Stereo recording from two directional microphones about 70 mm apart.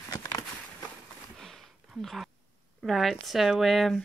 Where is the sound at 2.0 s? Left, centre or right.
Centre.